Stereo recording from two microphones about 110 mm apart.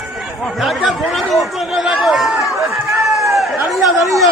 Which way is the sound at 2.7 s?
Centre (ahead or behind).